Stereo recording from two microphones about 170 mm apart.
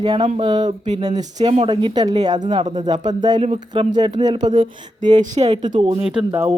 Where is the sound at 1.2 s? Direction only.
20° right (ahead or behind).